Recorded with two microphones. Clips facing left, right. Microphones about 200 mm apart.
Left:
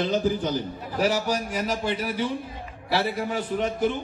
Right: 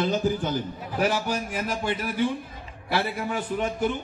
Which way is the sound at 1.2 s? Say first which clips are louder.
Left 2 dB; 40° left (ahead or behind).